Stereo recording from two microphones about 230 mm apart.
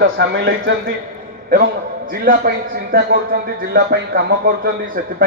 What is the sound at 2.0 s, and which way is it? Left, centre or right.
A man's voice, right.